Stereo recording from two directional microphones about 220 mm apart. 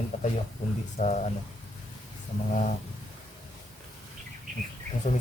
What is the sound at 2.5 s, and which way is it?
Speech, 35° left (ahead or behind).